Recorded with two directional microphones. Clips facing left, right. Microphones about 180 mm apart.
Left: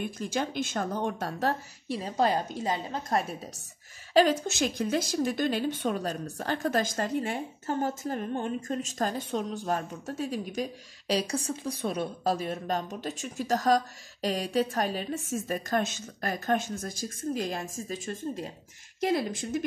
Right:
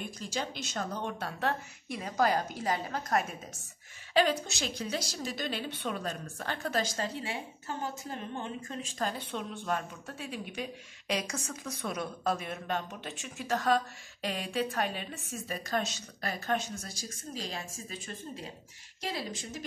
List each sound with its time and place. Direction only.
0.2 s speech: 55° left (ahead or behind); by 3.3 s 30° left (ahead or behind)
4.1 s speech: 45° left (ahead or behind)